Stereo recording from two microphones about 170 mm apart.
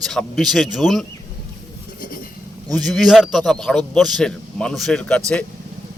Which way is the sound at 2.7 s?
Centre (ahead or behind).